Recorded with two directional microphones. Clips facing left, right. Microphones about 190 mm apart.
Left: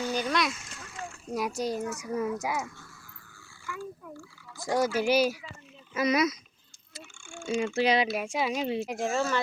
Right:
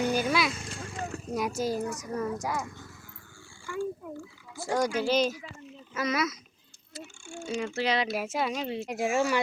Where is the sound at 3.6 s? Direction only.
30° right (ahead or behind).